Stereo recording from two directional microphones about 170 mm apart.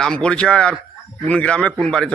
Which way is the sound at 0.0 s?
5° left (ahead or behind).